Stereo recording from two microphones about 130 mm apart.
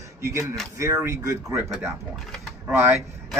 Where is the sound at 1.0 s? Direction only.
25° right (ahead or behind).